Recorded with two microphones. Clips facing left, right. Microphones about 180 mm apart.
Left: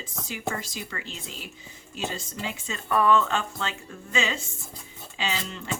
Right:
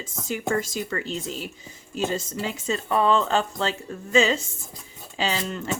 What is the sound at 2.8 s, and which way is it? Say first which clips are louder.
Speech: even; 25° right (ahead or behind).